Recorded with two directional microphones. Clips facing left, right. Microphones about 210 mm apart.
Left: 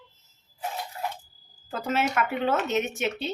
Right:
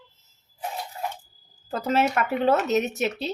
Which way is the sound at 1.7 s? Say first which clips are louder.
Right 4 dB; 40° right (ahead or behind).